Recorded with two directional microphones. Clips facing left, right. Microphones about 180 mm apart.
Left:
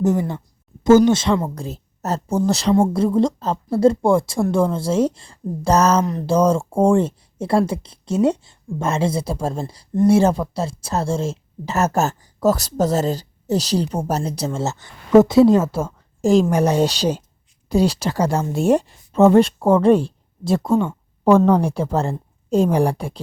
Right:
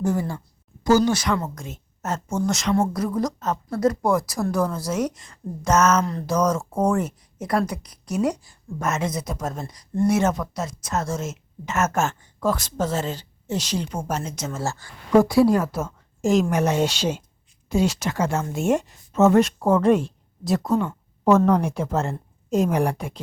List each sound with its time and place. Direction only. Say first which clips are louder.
0.0 s speech: left 5 dB; 20° left (ahead or behind)
6.1 s speech: left 5 dB; 20° left (ahead or behind)
6.3 s speech: left 5 dB; 30° left (ahead or behind)
14.6 s speech: left 4 dB; 20° left (ahead or behind)